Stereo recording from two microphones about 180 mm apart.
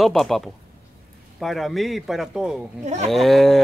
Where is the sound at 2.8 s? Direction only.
40° right (ahead or behind).